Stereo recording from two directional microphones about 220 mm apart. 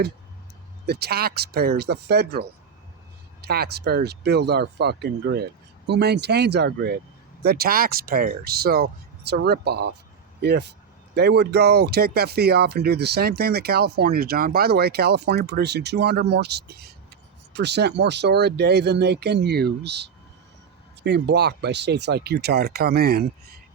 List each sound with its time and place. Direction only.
0.9 s speech: 45° right (ahead or behind)